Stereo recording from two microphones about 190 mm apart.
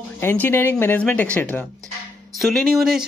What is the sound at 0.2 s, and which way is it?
Speech, 10° left (ahead or behind).